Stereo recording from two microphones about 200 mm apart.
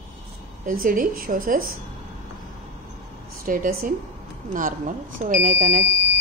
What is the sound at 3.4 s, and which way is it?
Speech, 45° right (ahead or behind).